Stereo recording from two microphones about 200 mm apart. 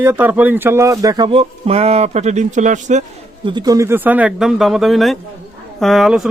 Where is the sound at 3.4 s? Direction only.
20° right (ahead or behind).